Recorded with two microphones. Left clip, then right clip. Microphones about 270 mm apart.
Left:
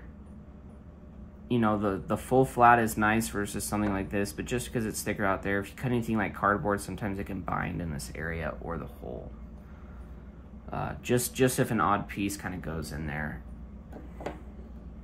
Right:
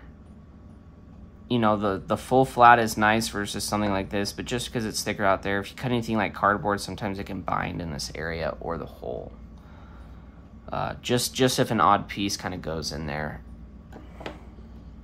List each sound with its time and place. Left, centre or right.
1.5 s speech: centre
10.7 s speech: centre